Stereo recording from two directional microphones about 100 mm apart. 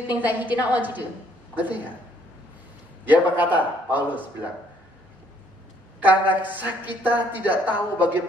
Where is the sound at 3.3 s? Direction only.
15° right (ahead or behind).